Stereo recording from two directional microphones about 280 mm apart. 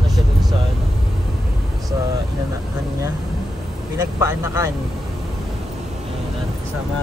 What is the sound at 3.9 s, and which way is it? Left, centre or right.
Speech, centre.